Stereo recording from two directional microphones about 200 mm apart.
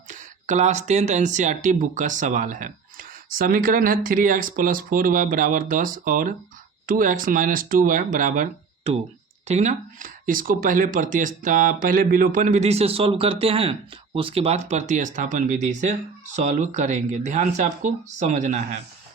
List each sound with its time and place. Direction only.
0.1 s speech: 40° right (ahead or behind)